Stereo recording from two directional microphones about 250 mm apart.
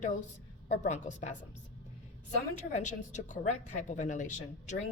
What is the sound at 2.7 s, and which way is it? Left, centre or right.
A woman's voice, left.